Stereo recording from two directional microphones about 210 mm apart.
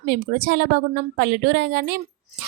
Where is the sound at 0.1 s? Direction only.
45° right (ahead or behind).